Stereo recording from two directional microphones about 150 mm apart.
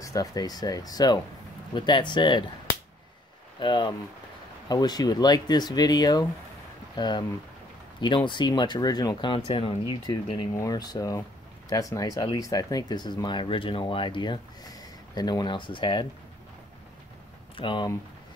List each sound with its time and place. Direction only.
0.0 s speech: 25° left (ahead or behind)
3.5 s speech: 30° left (ahead or behind)
8.3 s speech: 30° left (ahead or behind)
10.5 s speech: 25° left (ahead or behind)
17.6 s speech: 35° left (ahead or behind)